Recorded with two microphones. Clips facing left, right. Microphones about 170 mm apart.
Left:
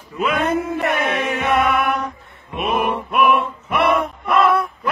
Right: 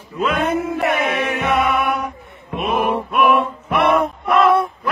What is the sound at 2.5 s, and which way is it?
Mantra, 5° left (ahead or behind).